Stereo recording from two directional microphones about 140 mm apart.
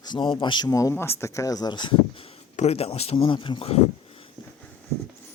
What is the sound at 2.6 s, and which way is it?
Speech, 50° left (ahead or behind).